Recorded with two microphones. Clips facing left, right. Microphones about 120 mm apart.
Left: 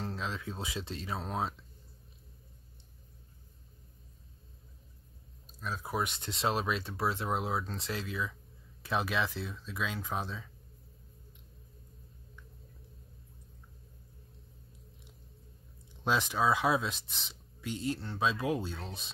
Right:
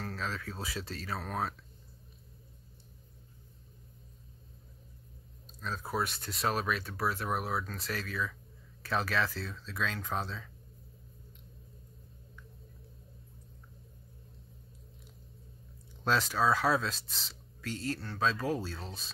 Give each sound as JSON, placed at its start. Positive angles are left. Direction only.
{"t": 0.0, "sound": "speech", "side_deg": 20}
{"t": 5.6, "sound": "speech", "side_deg": 10}
{"t": 16.0, "sound": "speech", "side_deg": 15}